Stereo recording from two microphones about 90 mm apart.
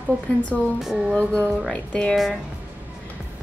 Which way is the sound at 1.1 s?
15° left (ahead or behind).